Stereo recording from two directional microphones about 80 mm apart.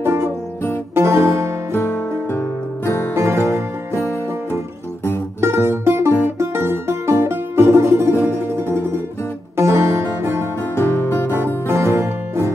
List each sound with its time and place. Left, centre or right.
0.0 s music: right
1.7 s music: left
3.2 s music: right
5.4 s music: right
10.8 s music: left
11.3 s music: right